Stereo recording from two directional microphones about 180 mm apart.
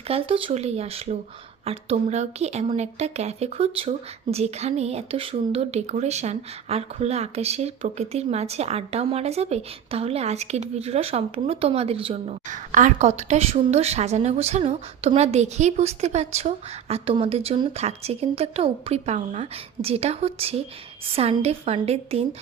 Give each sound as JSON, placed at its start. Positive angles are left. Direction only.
{"t": 0.1, "sound": "speech", "side_deg": -30}